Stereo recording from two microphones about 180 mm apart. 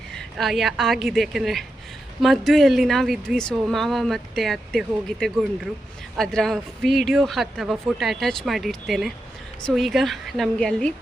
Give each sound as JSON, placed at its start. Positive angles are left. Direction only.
{"t": 0.1, "sound": "speech", "side_deg": 0}